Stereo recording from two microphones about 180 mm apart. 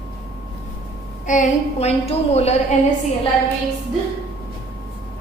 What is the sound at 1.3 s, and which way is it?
A woman's voice, 40° left (ahead or behind).